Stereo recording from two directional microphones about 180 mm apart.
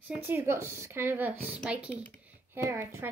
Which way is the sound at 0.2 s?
10° right (ahead or behind).